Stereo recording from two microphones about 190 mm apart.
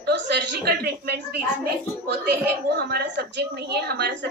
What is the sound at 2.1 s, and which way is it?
A woman's voice, 60° right (ahead or behind).